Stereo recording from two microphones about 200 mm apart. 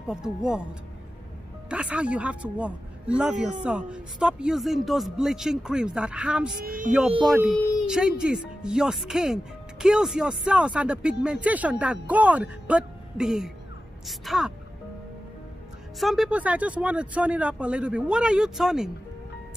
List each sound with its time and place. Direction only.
0.1 s speech: 5° right (ahead or behind)
1.7 s speech: 5° right (ahead or behind)
6.6 s speech: 45° right (ahead or behind)
7.2 s speech: centre (ahead or behind)
16.0 s speech: centre (ahead or behind)